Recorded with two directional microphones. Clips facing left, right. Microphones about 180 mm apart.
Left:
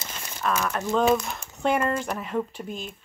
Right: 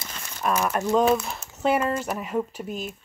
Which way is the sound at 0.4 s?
10° right (ahead or behind).